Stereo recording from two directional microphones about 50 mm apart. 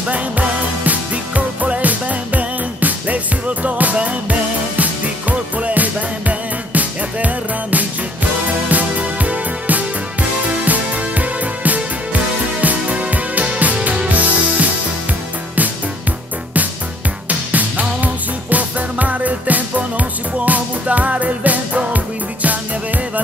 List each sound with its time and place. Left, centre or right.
0.1 s music: right
17.3 s music: right